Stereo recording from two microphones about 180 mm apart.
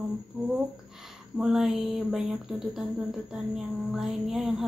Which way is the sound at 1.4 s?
Centre (ahead or behind).